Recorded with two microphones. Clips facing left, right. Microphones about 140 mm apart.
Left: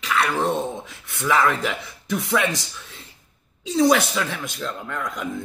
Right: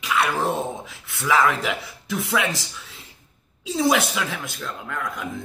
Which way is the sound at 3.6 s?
5° right (ahead or behind).